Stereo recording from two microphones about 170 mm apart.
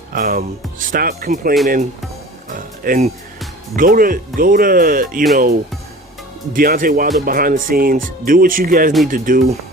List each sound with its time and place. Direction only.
0.1 s speech: 55° right (ahead or behind)